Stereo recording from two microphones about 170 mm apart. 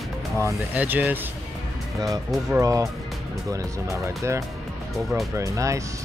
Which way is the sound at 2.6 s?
20° right (ahead or behind).